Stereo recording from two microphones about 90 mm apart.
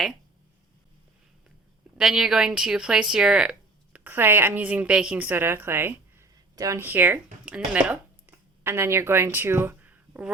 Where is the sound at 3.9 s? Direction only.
25° right (ahead or behind).